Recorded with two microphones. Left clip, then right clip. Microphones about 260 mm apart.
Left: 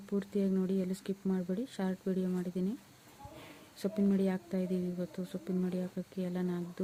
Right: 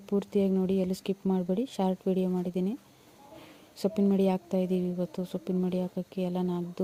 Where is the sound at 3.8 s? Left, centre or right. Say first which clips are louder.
Right 6 dB; centre.